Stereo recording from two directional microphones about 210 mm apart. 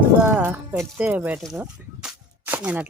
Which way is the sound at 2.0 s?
5° right (ahead or behind).